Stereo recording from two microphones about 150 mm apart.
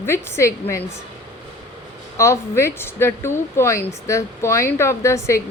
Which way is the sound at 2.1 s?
20° left (ahead or behind).